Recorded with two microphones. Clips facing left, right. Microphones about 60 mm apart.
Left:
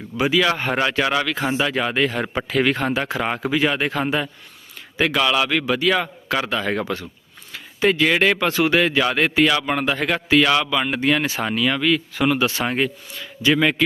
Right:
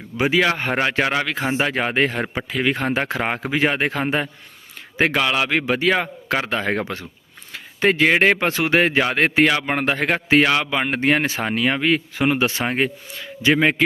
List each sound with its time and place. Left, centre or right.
0.2 s speech: right
2.5 s a man's voice: centre
2.7 s speech: right